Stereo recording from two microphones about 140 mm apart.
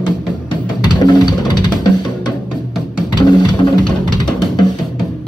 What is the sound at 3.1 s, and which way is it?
Music, 35° left (ahead or behind).